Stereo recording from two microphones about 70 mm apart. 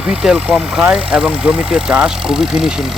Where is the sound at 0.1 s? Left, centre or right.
Centre.